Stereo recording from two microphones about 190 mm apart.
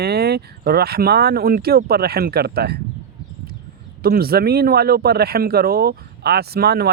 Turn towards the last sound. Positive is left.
turn(degrees=-55)  # may be behind; listen again after turning